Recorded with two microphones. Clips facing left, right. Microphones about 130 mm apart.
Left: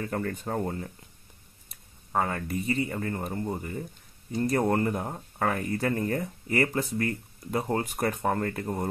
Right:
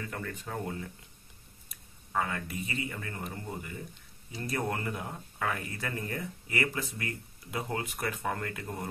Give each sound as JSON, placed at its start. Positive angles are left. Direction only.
{"t": 0.0, "sound": "speech", "side_deg": 40}
{"t": 2.1, "sound": "speech", "side_deg": 40}